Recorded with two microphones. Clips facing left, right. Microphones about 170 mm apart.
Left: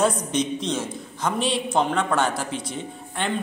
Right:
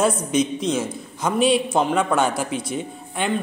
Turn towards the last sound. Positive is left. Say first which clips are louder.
# right 3 dB
turn(degrees=-10)  # may be behind; listen again after turning